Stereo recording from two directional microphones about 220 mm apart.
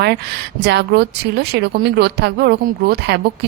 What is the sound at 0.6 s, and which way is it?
Speech, 50° right (ahead or behind).